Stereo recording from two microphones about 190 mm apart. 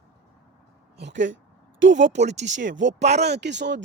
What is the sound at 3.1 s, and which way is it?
Speech, 60° right (ahead or behind).